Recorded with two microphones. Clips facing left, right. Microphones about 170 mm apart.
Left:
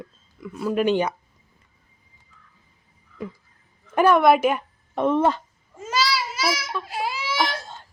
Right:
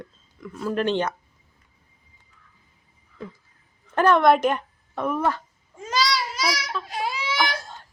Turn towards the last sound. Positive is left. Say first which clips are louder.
# even
turn(degrees=5)  # may be behind; listen again after turning